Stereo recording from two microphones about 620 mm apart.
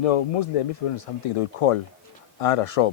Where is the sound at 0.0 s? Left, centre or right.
Left.